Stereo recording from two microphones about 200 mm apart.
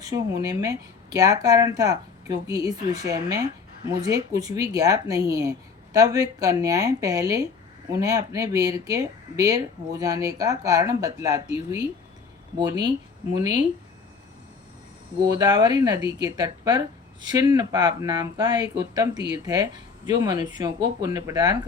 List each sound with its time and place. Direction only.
0.0 s speech: 15° right (ahead or behind)
15.2 s speech: 20° right (ahead or behind)